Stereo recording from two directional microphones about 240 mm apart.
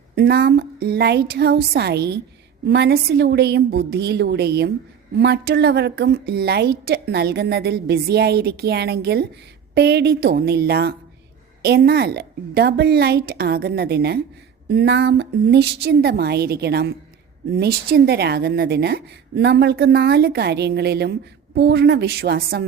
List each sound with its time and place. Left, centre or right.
0.2 s a woman's voice: right